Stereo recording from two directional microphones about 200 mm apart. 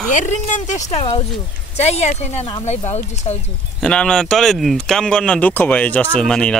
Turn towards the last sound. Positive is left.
turn(degrees=5)  # may be behind; listen again after turning